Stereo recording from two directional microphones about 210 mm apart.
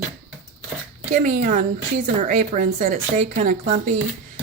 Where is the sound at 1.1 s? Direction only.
35° right (ahead or behind).